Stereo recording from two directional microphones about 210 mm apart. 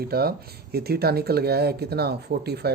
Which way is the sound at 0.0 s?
45° right (ahead or behind).